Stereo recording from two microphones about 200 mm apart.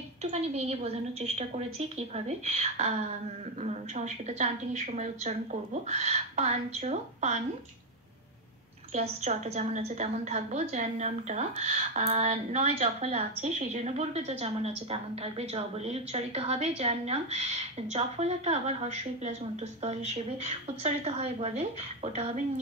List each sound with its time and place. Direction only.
0.2 s a woman's voice: 35° right (ahead or behind)
8.9 s a woman's voice: 35° right (ahead or behind)
20.4 s a woman's voice: 30° right (ahead or behind)